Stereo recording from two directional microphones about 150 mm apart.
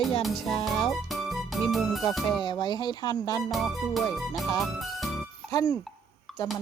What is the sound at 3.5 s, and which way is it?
Music, centre (ahead or behind).